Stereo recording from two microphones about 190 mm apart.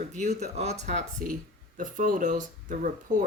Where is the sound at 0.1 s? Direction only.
35° right (ahead or behind).